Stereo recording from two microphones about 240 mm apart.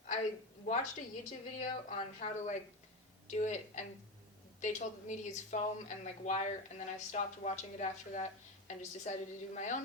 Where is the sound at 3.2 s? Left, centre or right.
Left.